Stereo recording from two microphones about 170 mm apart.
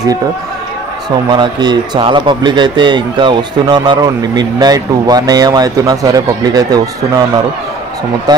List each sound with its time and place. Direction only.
1.3 s a man's voice: 25° right (ahead or behind)